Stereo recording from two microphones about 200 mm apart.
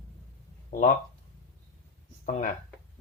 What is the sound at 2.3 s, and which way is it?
Speech, 35° left (ahead or behind).